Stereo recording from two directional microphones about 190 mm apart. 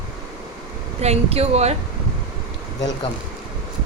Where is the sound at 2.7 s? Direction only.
20° left (ahead or behind).